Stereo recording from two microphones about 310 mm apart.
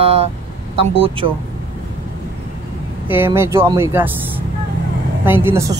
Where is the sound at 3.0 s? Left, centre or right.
Centre.